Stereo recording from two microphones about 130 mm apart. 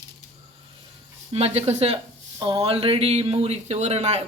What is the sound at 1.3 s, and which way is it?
Speech, 55° right (ahead or behind).